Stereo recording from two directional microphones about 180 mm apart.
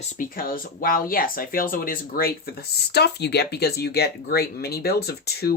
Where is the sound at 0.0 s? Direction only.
40° left (ahead or behind).